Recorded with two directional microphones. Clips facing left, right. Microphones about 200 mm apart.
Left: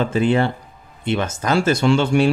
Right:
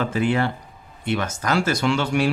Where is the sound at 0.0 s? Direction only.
25° left (ahead or behind).